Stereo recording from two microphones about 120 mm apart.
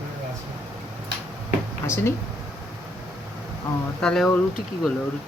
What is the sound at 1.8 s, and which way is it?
Speech, 20° left (ahead or behind).